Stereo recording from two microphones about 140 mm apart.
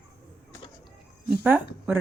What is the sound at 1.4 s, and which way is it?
Speech, 15° right (ahead or behind).